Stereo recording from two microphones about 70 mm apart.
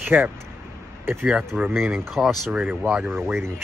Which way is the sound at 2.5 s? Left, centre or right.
Centre.